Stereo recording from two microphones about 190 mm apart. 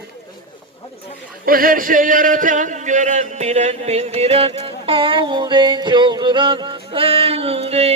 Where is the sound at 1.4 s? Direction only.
50° right (ahead or behind).